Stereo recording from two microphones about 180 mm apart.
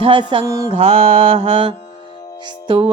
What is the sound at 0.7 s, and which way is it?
Music, 35° right (ahead or behind).